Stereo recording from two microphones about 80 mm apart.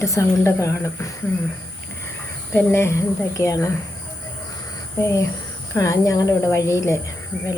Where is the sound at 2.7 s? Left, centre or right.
Left.